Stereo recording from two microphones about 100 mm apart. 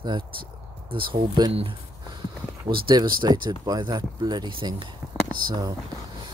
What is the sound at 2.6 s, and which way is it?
Speech, 55° right (ahead or behind).